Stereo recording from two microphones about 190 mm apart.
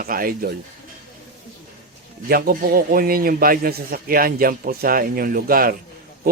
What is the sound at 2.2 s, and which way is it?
Speech, 50° right (ahead or behind).